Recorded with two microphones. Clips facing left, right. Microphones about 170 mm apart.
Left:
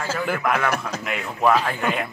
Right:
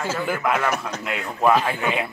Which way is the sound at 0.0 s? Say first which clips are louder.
Even; centre (ahead or behind).